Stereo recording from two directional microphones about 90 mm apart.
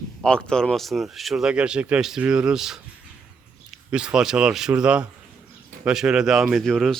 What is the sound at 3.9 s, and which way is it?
A man's voice, 10° right (ahead or behind).